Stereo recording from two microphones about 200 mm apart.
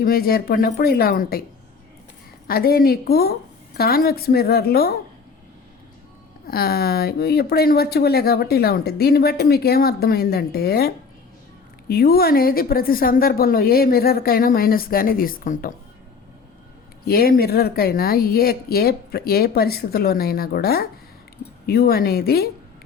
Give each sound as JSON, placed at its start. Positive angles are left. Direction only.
{"t": 0.0, "sound": "speech", "side_deg": 50}
{"t": 2.5, "sound": "speech", "side_deg": 50}
{"t": 6.5, "sound": "speech", "side_deg": 50}
{"t": 17.1, "sound": "speech", "side_deg": 50}